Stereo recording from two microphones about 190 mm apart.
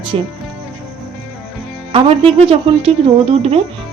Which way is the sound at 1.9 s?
30° right (ahead or behind).